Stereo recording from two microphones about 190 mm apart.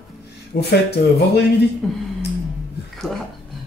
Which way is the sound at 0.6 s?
60° left (ahead or behind).